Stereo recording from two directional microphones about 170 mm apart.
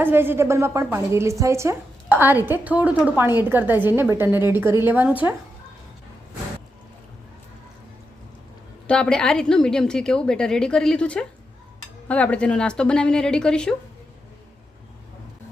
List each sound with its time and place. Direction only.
0.0 s a woman's voice: 15° right (ahead or behind)
8.9 s a woman's voice: 5° left (ahead or behind)